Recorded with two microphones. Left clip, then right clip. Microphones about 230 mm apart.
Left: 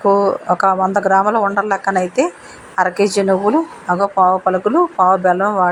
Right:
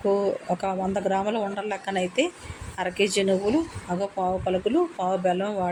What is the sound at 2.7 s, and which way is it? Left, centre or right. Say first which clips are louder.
Speech: left 10 dB; centre.